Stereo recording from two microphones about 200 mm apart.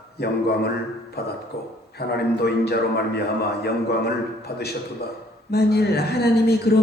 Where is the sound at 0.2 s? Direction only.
55° left (ahead or behind).